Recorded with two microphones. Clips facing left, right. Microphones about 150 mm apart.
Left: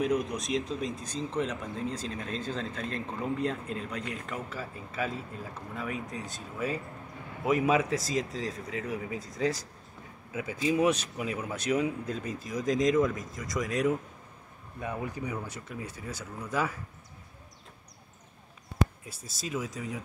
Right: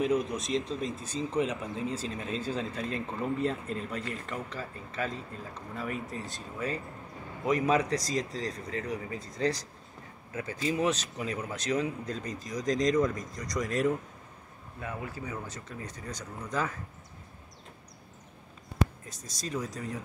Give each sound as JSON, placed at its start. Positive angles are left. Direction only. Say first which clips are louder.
{"t": 0.0, "sound": "a man's voice", "louder": "right 1 dB", "side_deg": 0}
{"t": 14.8, "sound": "a man's voice", "louder": "left 3 dB", "side_deg": 15}
{"t": 19.0, "sound": "speech", "louder": "even", "side_deg": 5}